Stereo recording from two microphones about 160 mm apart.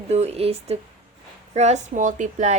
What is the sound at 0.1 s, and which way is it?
A woman's voice, 40° right (ahead or behind).